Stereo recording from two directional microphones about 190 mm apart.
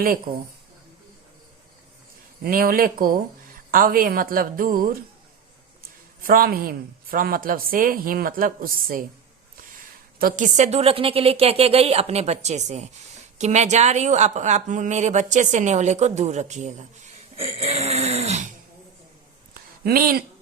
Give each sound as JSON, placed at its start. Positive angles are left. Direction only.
{"t": 0.0, "sound": "speech", "side_deg": -50}
{"t": 2.4, "sound": "speech", "side_deg": -50}
{"t": 6.2, "sound": "speech", "side_deg": -50}
{"t": 10.2, "sound": "speech", "side_deg": -45}
{"t": 17.4, "sound": "a sound", "side_deg": -30}
{"t": 19.8, "sound": "speech", "side_deg": -50}